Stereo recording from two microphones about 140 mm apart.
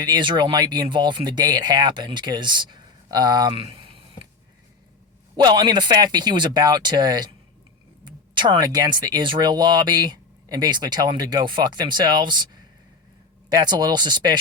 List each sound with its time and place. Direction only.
0.0 s speech: 30° right (ahead or behind)
5.4 s speech: 30° right (ahead or behind)